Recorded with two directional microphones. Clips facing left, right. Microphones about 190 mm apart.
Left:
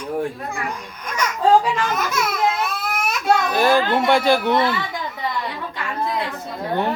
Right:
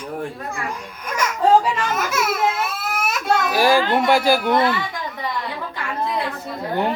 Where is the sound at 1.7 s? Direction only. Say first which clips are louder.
Even; 5° right (ahead or behind).